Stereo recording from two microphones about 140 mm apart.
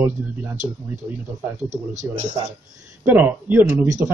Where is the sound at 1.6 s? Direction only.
60° right (ahead or behind).